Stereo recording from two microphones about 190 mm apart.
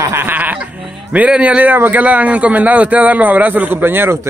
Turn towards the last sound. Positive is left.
turn(degrees=-15)  # may be behind; listen again after turning